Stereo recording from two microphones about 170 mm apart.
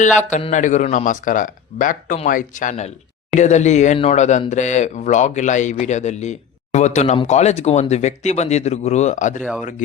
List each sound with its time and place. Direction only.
0.0 s speech: 45° left (ahead or behind)